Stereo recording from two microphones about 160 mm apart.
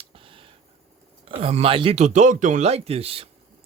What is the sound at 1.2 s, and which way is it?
Speech, 35° right (ahead or behind).